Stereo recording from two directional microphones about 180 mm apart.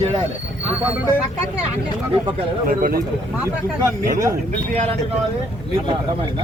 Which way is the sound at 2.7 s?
50° right (ahead or behind).